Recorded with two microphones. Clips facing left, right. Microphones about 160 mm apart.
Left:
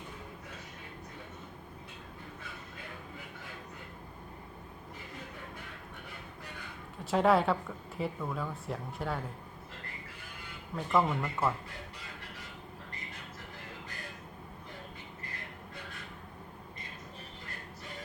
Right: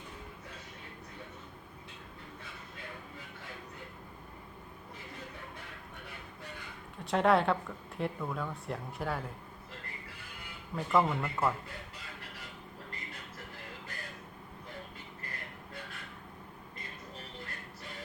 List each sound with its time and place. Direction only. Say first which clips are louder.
7.0 s speech: left 1 dB; centre (ahead or behind)
10.8 s speech: even; centre (ahead or behind)